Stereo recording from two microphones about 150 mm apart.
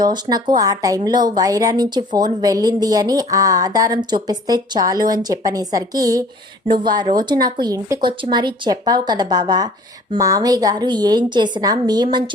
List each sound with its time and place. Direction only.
0.0 s a woman's voice: 25° right (ahead or behind)